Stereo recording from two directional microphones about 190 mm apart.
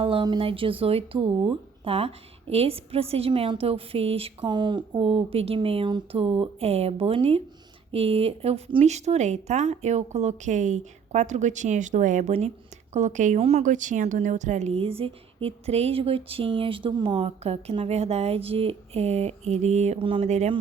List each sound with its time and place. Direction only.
0.0 s a woman's voice: 25° right (ahead or behind)